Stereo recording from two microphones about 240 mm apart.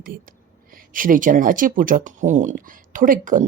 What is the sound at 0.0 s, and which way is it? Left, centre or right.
Speech, right.